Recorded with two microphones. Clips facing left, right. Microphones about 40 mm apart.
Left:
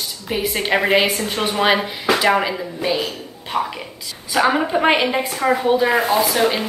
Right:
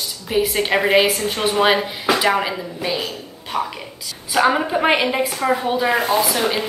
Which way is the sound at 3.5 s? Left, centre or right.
Left.